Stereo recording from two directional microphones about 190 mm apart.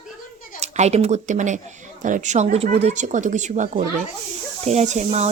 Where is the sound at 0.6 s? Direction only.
35° right (ahead or behind).